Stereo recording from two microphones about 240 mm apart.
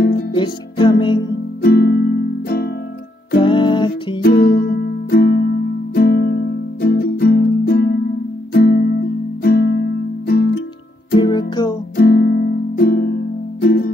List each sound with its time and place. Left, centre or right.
0.4 s music: centre
1.6 s music: left
3.3 s music: centre
4.2 s music: left
11.1 s music: centre
12.0 s music: left